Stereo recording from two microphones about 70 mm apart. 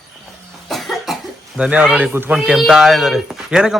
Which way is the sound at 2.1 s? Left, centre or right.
Right.